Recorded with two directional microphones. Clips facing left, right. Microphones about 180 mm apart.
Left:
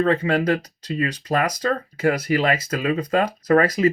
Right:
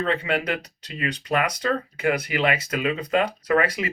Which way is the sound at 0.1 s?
35° left (ahead or behind).